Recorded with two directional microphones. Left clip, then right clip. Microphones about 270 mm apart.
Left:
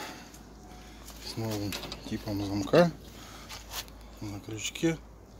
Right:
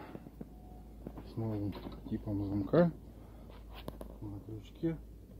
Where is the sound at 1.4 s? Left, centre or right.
Centre.